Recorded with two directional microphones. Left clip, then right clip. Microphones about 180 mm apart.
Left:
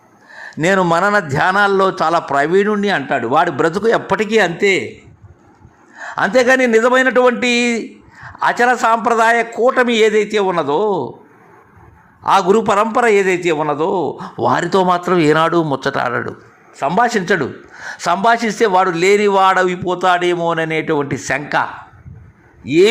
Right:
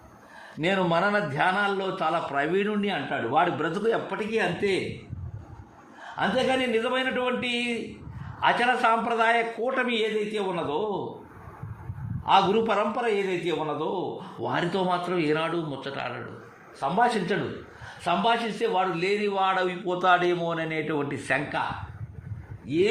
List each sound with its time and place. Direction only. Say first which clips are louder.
0.6 s a man's voice: left 11 dB; 35° left (ahead or behind)
3.4 s a man's voice: left 10 dB; 30° left (ahead or behind)
4.1 s a man's voice: left 13 dB; 45° left (ahead or behind)
6.1 s a man's voice: left 12 dB; 40° left (ahead or behind)
8.4 s a man's voice: left 9 dB; 30° left (ahead or behind)
9.9 s a man's voice: left 14 dB; 50° left (ahead or behind)
12.2 s a man's voice: left 9 dB; 35° left (ahead or behind)
12.9 s a man's voice: left 14 dB; 50° left (ahead or behind)
14.4 s a man's voice: left 13 dB; 40° left (ahead or behind)
18.0 s a man's voice: left 10 dB; 50° left (ahead or behind); by 21.4 s 25° left (ahead or behind)
22.6 s speech: left 13 dB; 55° left (ahead or behind)